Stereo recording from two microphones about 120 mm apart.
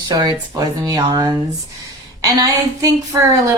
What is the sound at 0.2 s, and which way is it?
Speech, 35° right (ahead or behind).